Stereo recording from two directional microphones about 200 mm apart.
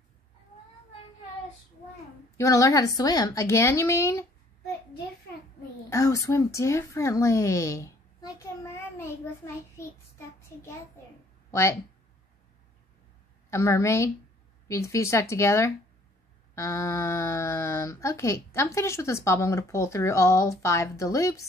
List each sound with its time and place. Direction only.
2.3 s speech: 15° left (ahead or behind)
5.9 s speech: 15° left (ahead or behind)
9.8 s child singing: 15° left (ahead or behind)
13.5 s speech: 15° left (ahead or behind)